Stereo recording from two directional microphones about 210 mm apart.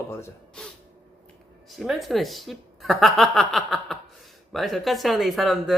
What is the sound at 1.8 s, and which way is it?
Speech, centre (ahead or behind).